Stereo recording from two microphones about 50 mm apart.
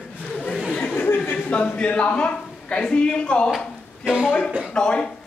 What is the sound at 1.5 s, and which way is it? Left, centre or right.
A man's voice, left.